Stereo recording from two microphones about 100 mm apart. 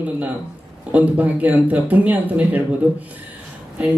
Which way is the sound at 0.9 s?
15° right (ahead or behind).